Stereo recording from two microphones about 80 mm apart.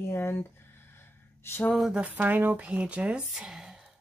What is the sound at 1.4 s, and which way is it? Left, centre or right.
Speech, left.